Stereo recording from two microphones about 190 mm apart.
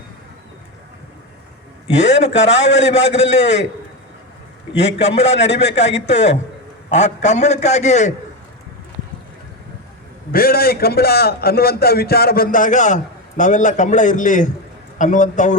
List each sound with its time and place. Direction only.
2.0 s a man's voice: 70° left (ahead or behind)
4.7 s a man's voice: 65° left (ahead or behind)
6.9 s a man's voice: 35° left (ahead or behind)
10.3 s a man's voice: 50° left (ahead or behind)